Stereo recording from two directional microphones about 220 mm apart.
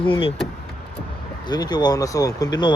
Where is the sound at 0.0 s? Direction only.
25° left (ahead or behind).